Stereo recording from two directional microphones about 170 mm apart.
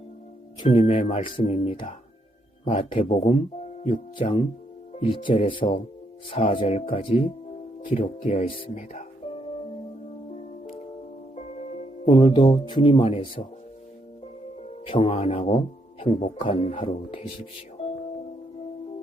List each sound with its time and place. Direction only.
0.7 s speech: 30° left (ahead or behind)
7.9 s speech: 40° left (ahead or behind)
11.3 s music: 40° left (ahead or behind)
12.0 s speech: 30° left (ahead or behind)
14.8 s speech: 30° left (ahead or behind)
17.8 s music: 40° left (ahead or behind)